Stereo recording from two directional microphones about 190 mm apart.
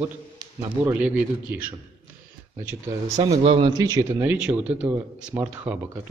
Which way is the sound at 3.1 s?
20° right (ahead or behind).